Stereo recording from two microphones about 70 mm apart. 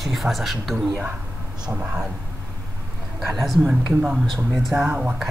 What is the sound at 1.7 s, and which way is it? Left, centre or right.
Speech, right.